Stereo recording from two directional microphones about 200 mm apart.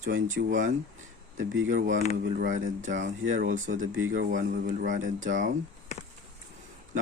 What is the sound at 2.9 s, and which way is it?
Speech, 70° right (ahead or behind).